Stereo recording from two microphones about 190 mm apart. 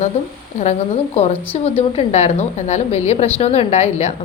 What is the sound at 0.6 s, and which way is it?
A woman's voice, 35° left (ahead or behind).